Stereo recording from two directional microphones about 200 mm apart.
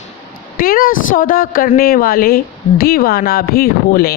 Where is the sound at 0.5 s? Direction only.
45° left (ahead or behind).